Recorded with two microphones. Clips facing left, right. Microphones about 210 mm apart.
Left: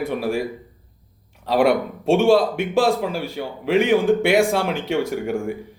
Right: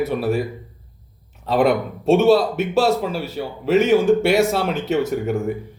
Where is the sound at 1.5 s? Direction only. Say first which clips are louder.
Even; 10° left (ahead or behind).